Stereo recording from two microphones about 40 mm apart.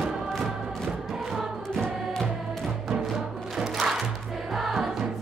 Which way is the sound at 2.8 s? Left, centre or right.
Centre.